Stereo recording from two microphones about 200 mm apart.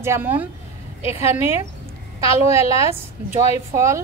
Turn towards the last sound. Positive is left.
turn(degrees=-15)  # may be behind; listen again after turning